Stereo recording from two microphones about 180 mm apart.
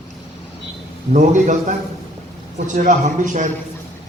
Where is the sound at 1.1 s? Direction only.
45° right (ahead or behind).